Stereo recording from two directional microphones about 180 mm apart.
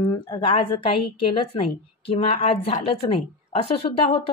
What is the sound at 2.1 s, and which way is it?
A woman's voice, 30° left (ahead or behind).